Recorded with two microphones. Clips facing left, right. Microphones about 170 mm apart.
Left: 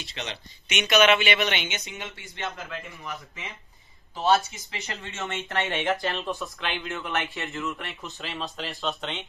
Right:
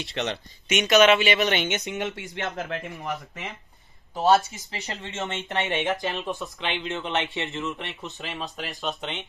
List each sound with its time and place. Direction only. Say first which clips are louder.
0.0 s speech: right 7 dB; 60° right (ahead or behind)
0.7 s speech: right 3 dB; 40° right (ahead or behind)
4.1 s speech: right 3 dB; 40° right (ahead or behind); by 9.2 s 15° right (ahead or behind)